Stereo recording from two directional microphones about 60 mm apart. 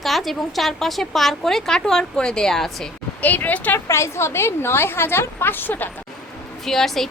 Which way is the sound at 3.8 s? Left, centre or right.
Left.